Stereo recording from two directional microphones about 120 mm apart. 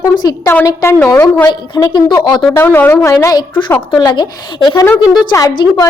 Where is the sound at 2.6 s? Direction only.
15° left (ahead or behind).